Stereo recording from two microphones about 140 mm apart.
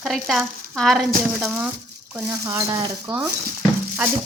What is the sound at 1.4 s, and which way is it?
Speech, 15° right (ahead or behind).